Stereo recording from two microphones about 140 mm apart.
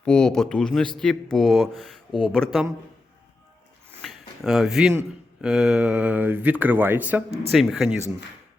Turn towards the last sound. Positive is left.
turn(degrees=0)  # may be behind; listen again after turning